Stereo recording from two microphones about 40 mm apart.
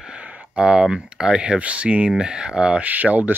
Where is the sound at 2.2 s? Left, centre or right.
Right.